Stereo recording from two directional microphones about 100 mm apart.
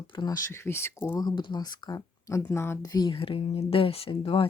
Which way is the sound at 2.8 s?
40° left (ahead or behind).